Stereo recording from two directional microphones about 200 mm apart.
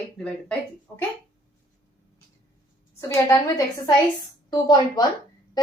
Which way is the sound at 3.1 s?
15° left (ahead or behind).